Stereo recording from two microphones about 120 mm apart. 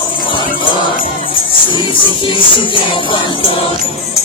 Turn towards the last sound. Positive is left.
turn(degrees=45)  # may be behind; listen again after turning